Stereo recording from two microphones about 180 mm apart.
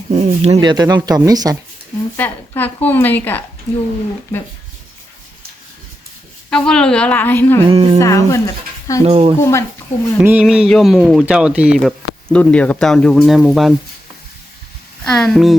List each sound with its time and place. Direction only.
0.1 s speech: 35° right (ahead or behind)
0.6 s speech: 25° right (ahead or behind)
2.1 s a woman's voice: 10° left (ahead or behind)
3.7 s speech: 35° left (ahead or behind)
6.5 s a woman's voice: 5° left (ahead or behind)
7.7 s speech: 30° right (ahead or behind)
7.9 s speech: 15° left (ahead or behind)
9.0 s speech: 30° right (ahead or behind)
9.4 s a woman's voice: 15° left (ahead or behind)
10.2 s speech: 10° right (ahead or behind)
15.0 s speech: 5° left (ahead or behind)